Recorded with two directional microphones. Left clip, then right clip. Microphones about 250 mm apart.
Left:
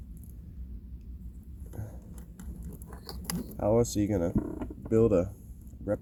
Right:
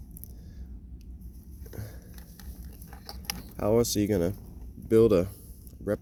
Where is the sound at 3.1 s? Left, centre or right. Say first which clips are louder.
Right 3 dB; left.